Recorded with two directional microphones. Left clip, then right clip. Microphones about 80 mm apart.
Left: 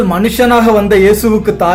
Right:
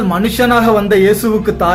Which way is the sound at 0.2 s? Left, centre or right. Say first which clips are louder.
Left 2 dB; left.